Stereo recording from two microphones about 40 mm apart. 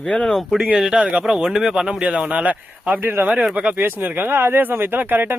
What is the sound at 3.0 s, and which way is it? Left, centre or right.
Speech, right.